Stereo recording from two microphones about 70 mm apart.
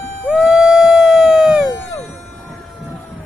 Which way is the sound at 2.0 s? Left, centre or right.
Centre.